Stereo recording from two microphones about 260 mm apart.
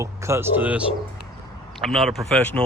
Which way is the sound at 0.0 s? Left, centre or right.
Centre.